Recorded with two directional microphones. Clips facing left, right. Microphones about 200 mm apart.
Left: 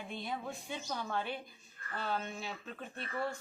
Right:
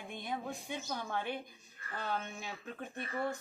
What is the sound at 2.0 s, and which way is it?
Speech, 15° right (ahead or behind).